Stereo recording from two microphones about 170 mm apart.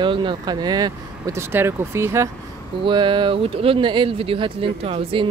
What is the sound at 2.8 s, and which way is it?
Speech, 30° right (ahead or behind).